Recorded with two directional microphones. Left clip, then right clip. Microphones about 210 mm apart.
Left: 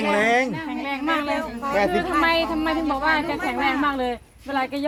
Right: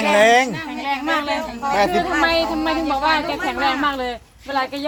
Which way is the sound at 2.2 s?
10° left (ahead or behind).